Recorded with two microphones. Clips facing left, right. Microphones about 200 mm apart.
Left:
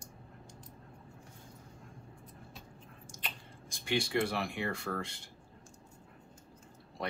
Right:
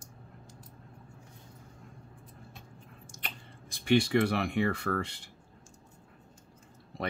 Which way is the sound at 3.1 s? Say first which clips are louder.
Right 1 dB; 60° right (ahead or behind).